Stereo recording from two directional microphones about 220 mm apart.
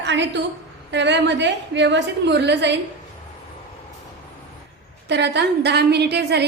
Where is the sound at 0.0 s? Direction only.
55° right (ahead or behind).